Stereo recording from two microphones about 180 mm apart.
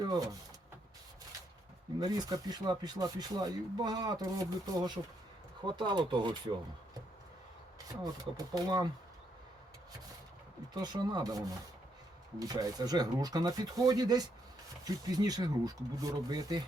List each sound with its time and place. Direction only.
0.0 s speech: 20° right (ahead or behind)
2.0 s speech: 20° right (ahead or behind)
8.0 s speech: 20° right (ahead or behind)
10.8 s speech: 25° right (ahead or behind)